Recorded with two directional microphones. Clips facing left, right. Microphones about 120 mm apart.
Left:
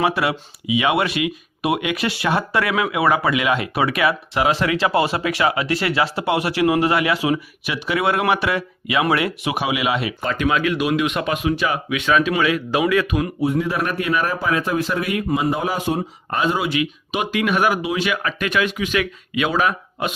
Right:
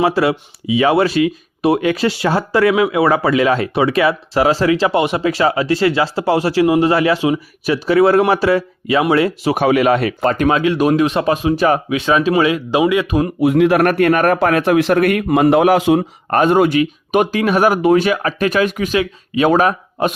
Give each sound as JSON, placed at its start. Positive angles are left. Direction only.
{"t": 0.0, "sound": "speech", "side_deg": -30}
{"t": 9.6, "sound": "speech", "side_deg": -45}
{"t": 13.1, "sound": "speech", "side_deg": -35}
{"t": 13.4, "sound": "a man's voice", "side_deg": -80}
{"t": 16.3, "sound": "speech", "side_deg": -55}
{"t": 19.5, "sound": "speech", "side_deg": -40}